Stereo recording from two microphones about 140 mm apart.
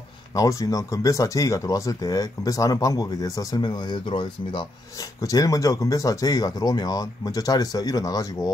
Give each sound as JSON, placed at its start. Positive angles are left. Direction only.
{"t": 0.3, "sound": "speech", "side_deg": 25}